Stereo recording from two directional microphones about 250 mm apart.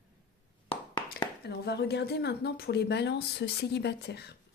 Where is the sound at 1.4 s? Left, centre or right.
Left.